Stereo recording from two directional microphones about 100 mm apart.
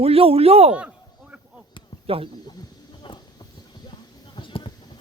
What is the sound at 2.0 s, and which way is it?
Speech, 70° right (ahead or behind).